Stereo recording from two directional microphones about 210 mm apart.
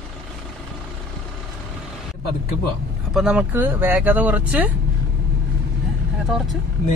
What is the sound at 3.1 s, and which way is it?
Speech, 5° right (ahead or behind).